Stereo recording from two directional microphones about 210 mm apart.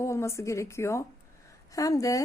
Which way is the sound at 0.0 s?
15° left (ahead or behind).